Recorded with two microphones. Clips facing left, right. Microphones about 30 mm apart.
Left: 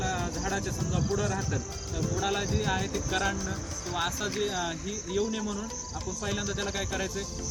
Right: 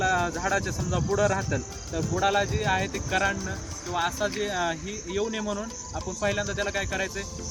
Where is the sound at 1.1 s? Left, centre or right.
Right.